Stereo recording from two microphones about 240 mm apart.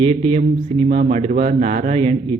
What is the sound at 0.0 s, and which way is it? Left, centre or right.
A man's voice, right.